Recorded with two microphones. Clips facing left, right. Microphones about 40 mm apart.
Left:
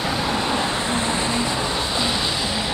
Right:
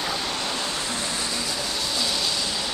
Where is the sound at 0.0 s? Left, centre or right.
Centre.